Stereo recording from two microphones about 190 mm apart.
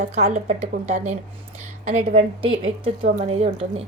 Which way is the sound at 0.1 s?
35° right (ahead or behind).